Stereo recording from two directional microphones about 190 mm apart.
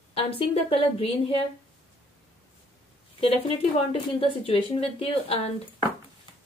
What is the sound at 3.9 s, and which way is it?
Speech, 30° left (ahead or behind).